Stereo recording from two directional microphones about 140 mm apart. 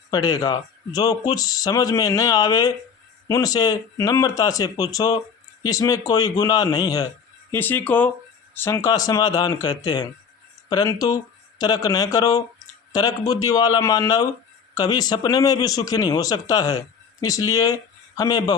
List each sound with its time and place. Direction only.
0.1 s speech: 30° left (ahead or behind)
7.5 s speech: 15° left (ahead or behind)